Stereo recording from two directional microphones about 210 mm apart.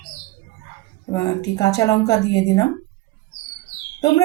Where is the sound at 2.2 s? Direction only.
55° left (ahead or behind).